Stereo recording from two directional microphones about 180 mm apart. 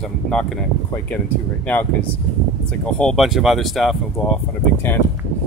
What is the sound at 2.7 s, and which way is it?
Speech, 5° left (ahead or behind).